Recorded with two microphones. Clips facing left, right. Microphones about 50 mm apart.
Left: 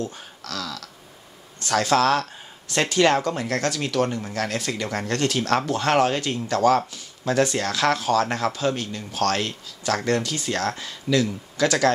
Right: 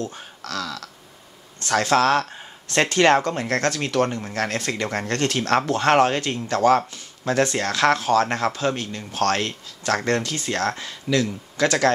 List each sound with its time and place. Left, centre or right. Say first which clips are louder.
0.0 s speech: right 1 dB; right
1.7 s speech: right 1 dB; right
2.7 s speech: right 2 dB; right
10.9 s speech: even; centre